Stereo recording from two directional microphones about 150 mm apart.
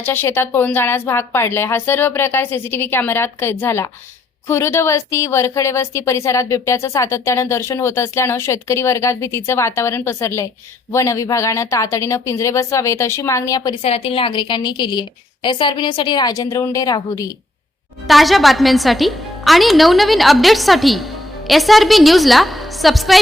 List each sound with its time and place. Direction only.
0.0 s a woman's voice: 15° left (ahead or behind)
13.8 s a woman's voice: 40° left (ahead or behind); by 17.3 s 25° left (ahead or behind)
18.1 s a woman's voice: centre (ahead or behind)